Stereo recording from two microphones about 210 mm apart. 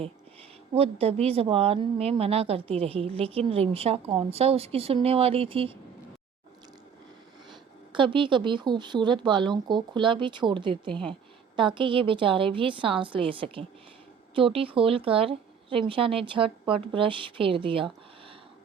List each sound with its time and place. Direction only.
0.7 s a woman's voice: 30° right (ahead or behind)
7.9 s a woman's voice: 25° right (ahead or behind)